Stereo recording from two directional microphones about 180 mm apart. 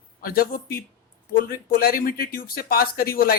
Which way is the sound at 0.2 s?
55° left (ahead or behind).